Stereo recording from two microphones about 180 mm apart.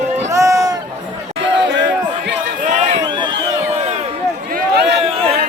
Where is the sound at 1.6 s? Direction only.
80° right.